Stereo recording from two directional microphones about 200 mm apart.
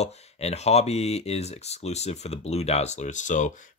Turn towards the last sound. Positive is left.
turn(degrees=40)  # may be behind; listen again after turning